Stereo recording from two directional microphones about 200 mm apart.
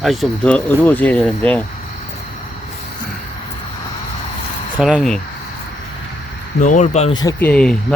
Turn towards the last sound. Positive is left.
turn(degrees=5)  # may be behind; listen again after turning